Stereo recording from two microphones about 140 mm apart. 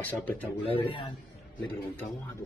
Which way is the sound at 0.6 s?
40° left (ahead or behind).